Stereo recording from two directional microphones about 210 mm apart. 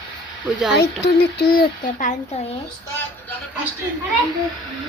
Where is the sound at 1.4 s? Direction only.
45° left (ahead or behind).